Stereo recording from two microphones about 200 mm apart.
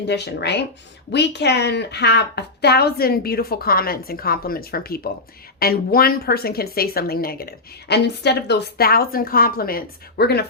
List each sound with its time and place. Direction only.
0.1 s a woman's voice: 55° left (ahead or behind)